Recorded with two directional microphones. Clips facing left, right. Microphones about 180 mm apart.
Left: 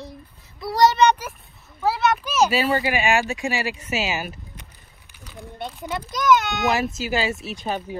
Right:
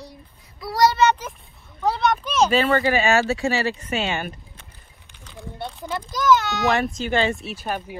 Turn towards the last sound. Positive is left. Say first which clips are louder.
# left 1 dB
turn(degrees=-10)  # may be behind; listen again after turning